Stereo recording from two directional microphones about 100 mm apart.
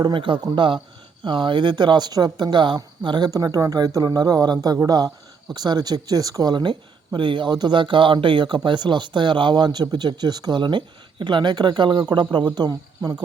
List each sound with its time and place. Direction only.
0.0 s speech: 60° right (ahead or behind); by 13.1 s 45° right (ahead or behind)